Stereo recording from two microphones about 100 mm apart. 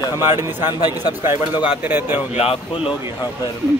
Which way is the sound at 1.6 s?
15° right (ahead or behind).